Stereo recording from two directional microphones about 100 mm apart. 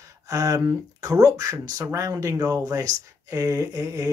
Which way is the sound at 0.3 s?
35° right (ahead or behind).